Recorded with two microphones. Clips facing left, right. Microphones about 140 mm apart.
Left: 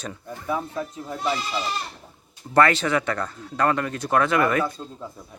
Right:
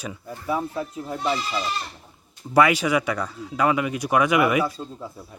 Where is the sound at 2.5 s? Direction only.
10° right (ahead or behind).